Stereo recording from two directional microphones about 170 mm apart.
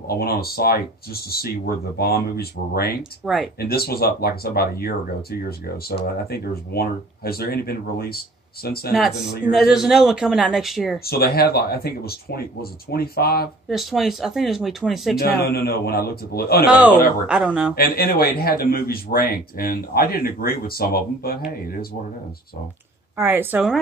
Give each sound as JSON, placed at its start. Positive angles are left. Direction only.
{"t": 0.1, "sound": "a man's voice", "side_deg": 65}
{"t": 9.5, "sound": "speech", "side_deg": 0}
{"t": 11.1, "sound": "a man's voice", "side_deg": 65}
{"t": 13.7, "sound": "speech", "side_deg": 0}
{"t": 15.4, "sound": "a man's voice", "side_deg": 65}
{"t": 16.6, "sound": "speech", "side_deg": -10}
{"t": 17.7, "sound": "a man's voice", "side_deg": 60}
{"t": 23.1, "sound": "speech", "side_deg": -10}